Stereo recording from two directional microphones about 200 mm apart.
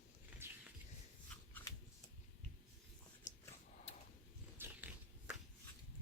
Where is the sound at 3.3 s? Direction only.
35° left (ahead or behind).